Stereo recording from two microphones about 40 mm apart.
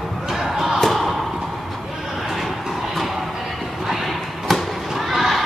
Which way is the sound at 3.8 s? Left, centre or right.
Centre.